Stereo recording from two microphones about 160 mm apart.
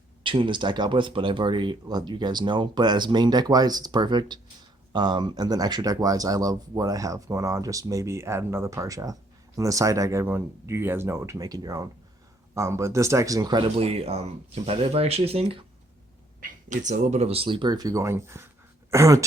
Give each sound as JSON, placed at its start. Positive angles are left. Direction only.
{"t": 0.2, "sound": "speech", "side_deg": -30}
{"t": 16.4, "sound": "speech", "side_deg": -50}